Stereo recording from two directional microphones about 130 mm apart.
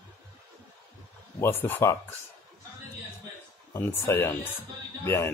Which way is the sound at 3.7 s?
20° left (ahead or behind).